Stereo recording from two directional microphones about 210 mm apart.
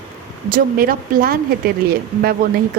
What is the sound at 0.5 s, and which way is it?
Speech, 45° right (ahead or behind).